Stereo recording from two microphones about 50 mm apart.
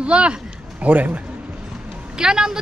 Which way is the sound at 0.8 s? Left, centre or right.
Right.